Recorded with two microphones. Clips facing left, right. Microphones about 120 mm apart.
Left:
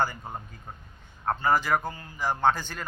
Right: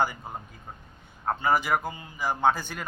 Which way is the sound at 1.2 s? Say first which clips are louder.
Even; 5° right (ahead or behind).